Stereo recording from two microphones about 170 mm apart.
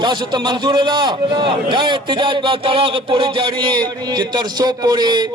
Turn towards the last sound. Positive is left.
turn(degrees=-25)  # may be behind; listen again after turning